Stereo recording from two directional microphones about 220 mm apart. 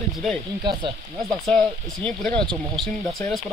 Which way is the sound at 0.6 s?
20° right (ahead or behind).